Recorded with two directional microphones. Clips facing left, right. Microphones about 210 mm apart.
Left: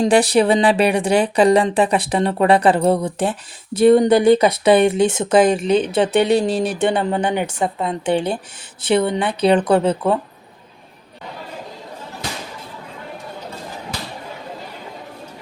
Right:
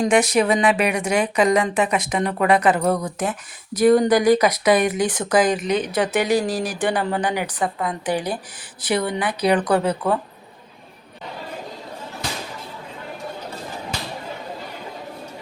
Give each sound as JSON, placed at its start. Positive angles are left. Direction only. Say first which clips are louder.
{"t": 0.0, "sound": "speech", "louder": "left 3 dB", "side_deg": 30}